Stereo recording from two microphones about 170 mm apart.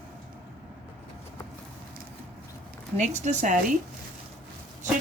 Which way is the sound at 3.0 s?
45° right (ahead or behind).